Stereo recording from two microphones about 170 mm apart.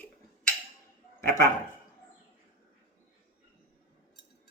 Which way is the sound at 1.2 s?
15° left (ahead or behind).